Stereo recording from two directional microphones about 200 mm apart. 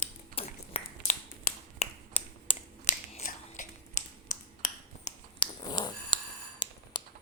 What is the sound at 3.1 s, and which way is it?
Finger snapping, 35° left (ahead or behind).